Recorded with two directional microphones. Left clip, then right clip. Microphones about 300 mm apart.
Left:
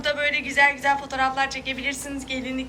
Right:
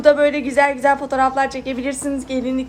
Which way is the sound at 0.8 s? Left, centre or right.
Right.